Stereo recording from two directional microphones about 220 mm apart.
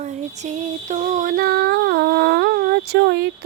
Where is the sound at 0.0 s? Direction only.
30° right (ahead or behind).